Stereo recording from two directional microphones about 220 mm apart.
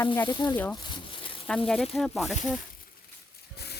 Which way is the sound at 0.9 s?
20° left (ahead or behind).